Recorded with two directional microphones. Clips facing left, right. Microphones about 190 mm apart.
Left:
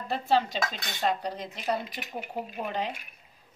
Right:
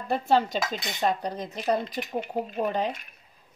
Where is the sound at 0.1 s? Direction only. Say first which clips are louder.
Right 3 dB; 50° right (ahead or behind).